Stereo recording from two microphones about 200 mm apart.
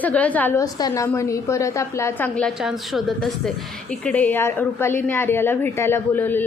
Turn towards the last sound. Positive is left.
turn(degrees=10)  # may be behind; listen again after turning